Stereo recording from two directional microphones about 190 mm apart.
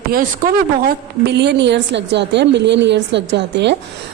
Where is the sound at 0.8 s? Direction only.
65° right (ahead or behind).